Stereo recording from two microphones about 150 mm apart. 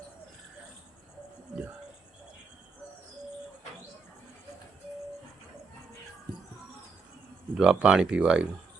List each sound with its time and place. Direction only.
7.5 s speech: 5° right (ahead or behind)